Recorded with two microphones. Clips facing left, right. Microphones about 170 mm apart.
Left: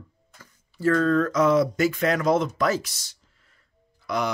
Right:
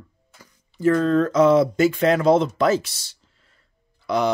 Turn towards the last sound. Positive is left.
turn(degrees=-30)  # may be behind; listen again after turning